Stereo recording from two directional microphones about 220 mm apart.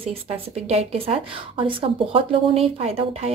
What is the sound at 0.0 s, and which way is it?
A woman's voice, 25° right (ahead or behind).